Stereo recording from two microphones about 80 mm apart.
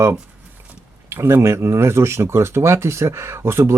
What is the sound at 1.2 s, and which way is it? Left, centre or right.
Speech, right.